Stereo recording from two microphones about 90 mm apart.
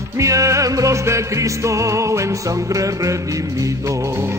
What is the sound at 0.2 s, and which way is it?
Music, 35° right (ahead or behind).